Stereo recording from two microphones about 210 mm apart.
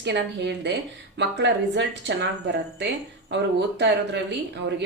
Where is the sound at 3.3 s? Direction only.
55° right (ahead or behind).